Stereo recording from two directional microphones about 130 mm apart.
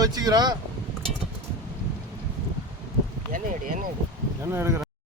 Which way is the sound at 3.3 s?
80° right.